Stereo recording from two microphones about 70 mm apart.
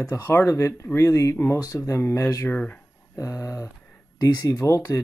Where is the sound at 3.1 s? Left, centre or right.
Left.